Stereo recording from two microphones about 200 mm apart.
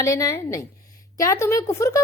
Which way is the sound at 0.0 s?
15° left (ahead or behind).